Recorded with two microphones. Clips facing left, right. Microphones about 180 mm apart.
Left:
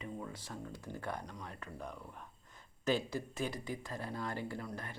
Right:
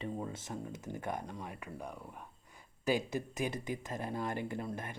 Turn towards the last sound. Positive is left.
turn(degrees=-20)  # may be behind; listen again after turning